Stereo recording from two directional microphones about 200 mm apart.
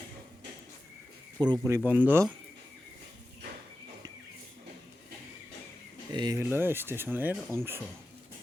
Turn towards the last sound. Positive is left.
turn(degrees=-10)  # may be behind; listen again after turning